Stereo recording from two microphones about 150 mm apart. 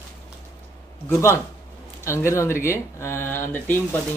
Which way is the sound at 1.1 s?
20° left (ahead or behind).